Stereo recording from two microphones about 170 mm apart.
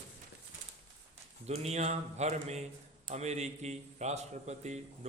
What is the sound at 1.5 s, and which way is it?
A man's voice, 40° right (ahead or behind).